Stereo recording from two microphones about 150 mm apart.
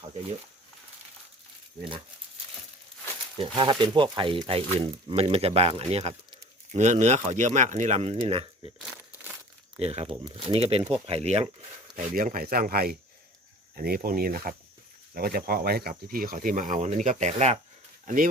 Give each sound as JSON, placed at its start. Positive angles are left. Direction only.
{"t": 3.3, "sound": "speech", "side_deg": -35}
{"t": 9.7, "sound": "speech", "side_deg": -45}
{"t": 12.1, "sound": "speech", "side_deg": -70}
{"t": 18.0, "sound": "speech", "side_deg": -65}